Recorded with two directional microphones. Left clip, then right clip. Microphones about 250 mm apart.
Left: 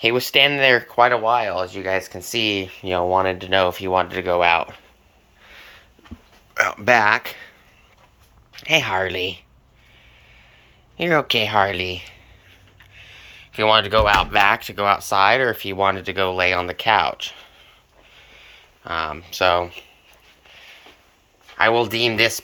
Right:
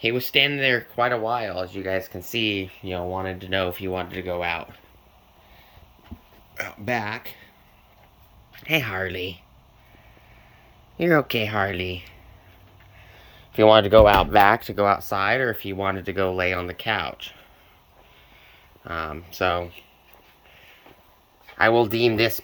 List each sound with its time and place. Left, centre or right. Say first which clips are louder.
0.0 s speech: left 5 dB; centre
6.5 s speech: left 11 dB; centre
8.5 s speech: left 6 dB; centre
10.9 s speech: left 2 dB; right
18.1 s a sound: left 7 dB; centre
21.6 s speech: left 1 dB; right